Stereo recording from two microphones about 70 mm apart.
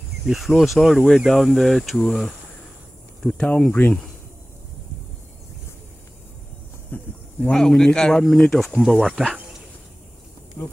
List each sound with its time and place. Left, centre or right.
0.3 s speech: centre
6.9 s insect: centre
7.5 s speech: centre
8.8 s speech: centre
9.1 s speech: centre
10.6 s speech: left